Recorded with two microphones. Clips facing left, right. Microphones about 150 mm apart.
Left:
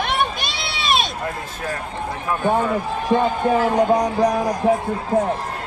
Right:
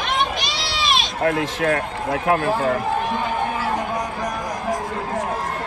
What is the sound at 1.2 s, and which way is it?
Speech, 85° right.